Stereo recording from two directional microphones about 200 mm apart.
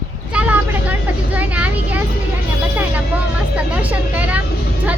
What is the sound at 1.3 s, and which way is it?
Speech, 5° right (ahead or behind).